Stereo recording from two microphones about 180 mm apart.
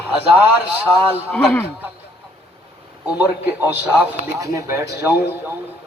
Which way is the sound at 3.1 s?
10° right (ahead or behind).